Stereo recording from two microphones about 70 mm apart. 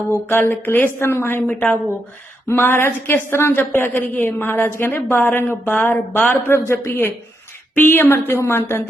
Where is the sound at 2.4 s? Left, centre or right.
Left.